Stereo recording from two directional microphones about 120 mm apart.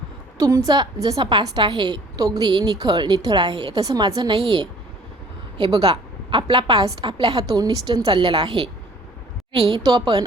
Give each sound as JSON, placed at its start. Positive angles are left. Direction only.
{"t": 0.3, "sound": "a woman's voice", "side_deg": -30}
{"t": 5.7, "sound": "a woman's voice", "side_deg": -35}